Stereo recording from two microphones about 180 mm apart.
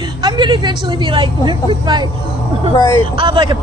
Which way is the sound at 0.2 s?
25° right (ahead or behind).